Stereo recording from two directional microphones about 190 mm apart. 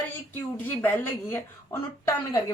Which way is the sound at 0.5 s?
10° left (ahead or behind).